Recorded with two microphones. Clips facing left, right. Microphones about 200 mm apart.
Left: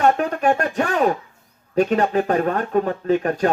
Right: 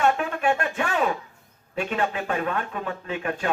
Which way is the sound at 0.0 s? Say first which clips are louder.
Left 5 dB; 40° left (ahead or behind).